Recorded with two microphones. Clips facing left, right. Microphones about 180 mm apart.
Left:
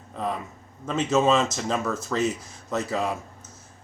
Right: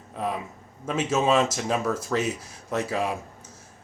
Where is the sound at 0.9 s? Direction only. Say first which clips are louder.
Left 2 dB; 5° right (ahead or behind).